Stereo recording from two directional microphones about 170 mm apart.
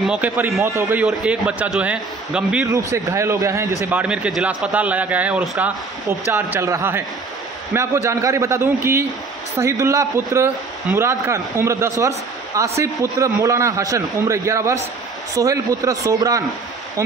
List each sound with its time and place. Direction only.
0.0 s a man's voice: 5° right (ahead or behind)
2.7 s a man's voice: 20° right (ahead or behind)